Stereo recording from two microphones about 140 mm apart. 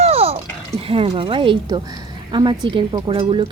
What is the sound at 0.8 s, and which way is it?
A woman's voice, 40° right (ahead or behind).